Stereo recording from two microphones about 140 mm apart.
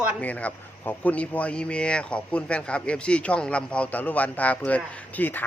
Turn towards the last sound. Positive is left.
turn(degrees=10)  # may be behind; listen again after turning